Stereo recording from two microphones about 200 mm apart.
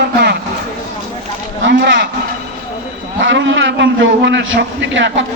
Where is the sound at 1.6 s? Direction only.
60° right (ahead or behind).